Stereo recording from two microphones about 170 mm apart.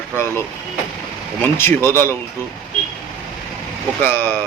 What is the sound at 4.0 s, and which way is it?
Speech, 10° left (ahead or behind).